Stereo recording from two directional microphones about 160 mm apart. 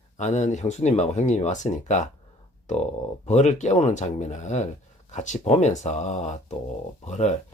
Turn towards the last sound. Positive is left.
turn(degrees=45)  # may be behind; listen again after turning